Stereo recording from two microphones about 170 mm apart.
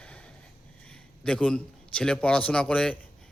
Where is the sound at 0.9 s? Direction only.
5° left (ahead or behind).